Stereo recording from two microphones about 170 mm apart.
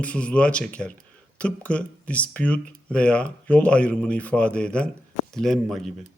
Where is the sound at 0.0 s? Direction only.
5° left (ahead or behind).